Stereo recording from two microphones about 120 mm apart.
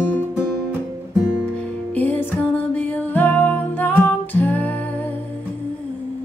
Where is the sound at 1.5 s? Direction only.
10° left (ahead or behind).